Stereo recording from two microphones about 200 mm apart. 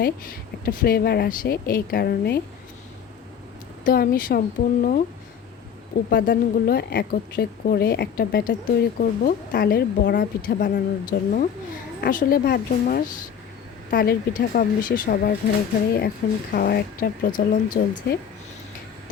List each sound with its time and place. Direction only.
0.0 s a woman's voice: 45° left (ahead or behind)
3.8 s a woman's voice: 45° left (ahead or behind)
6.1 s a woman's voice: 50° left (ahead or behind)